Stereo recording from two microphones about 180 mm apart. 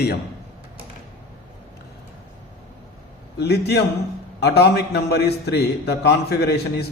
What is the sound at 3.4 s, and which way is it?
A man's voice, 65° left (ahead or behind).